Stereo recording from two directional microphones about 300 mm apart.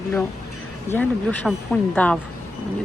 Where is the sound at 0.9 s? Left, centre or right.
Centre.